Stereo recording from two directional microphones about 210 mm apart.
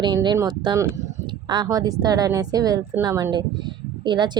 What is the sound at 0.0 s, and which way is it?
A woman's voice, 20° right (ahead or behind).